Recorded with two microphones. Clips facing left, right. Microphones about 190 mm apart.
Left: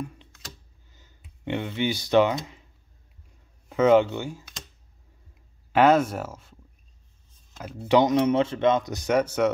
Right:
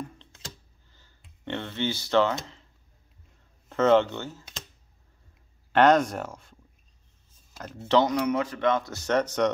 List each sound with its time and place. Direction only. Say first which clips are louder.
1.2 s speech: left 4 dB; 10° left (ahead or behind)
3.6 s speech: left 2 dB; 10° left (ahead or behind)
5.7 s speech: left 1 dB; 5° left (ahead or behind)
7.9 s speech: left 3 dB; 20° left (ahead or behind)